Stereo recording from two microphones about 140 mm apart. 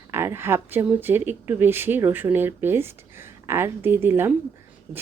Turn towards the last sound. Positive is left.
turn(degrees=-15)  # may be behind; listen again after turning